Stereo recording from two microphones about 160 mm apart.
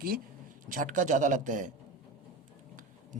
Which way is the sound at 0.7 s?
55° right (ahead or behind).